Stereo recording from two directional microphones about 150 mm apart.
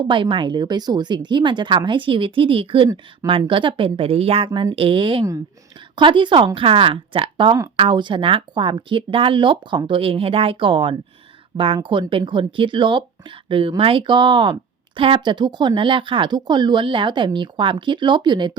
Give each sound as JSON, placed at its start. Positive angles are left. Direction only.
{"t": 0.1, "sound": "speech", "side_deg": -35}